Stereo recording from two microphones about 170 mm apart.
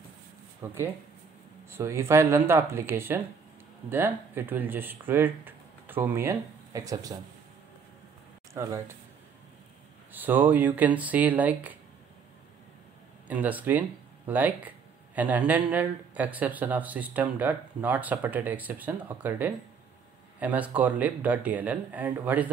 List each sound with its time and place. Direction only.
0.6 s speech: 15° right (ahead or behind)
8.5 s speech: 15° right (ahead or behind)
10.1 s speech: 10° right (ahead or behind)
13.3 s speech: 10° right (ahead or behind)